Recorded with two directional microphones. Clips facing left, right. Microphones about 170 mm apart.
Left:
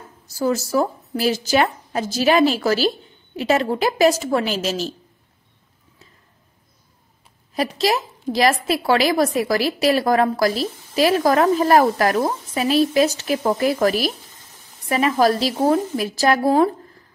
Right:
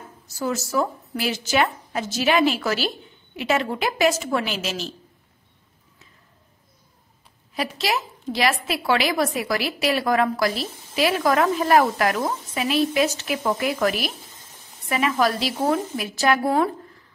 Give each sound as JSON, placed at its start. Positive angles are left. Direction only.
{"t": 0.3, "sound": "a woman's voice", "side_deg": 35}
{"t": 7.5, "sound": "a woman's voice", "side_deg": 40}